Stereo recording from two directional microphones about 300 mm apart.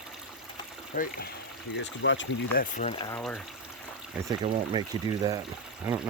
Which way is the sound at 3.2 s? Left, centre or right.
Centre.